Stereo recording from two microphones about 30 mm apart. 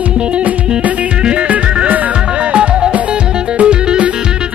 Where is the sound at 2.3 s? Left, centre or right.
Right.